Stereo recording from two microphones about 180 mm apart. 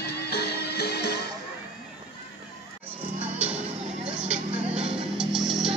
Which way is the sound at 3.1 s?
10° right (ahead or behind).